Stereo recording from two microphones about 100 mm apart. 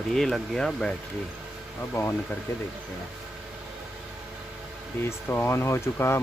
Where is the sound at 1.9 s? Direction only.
20° left (ahead or behind).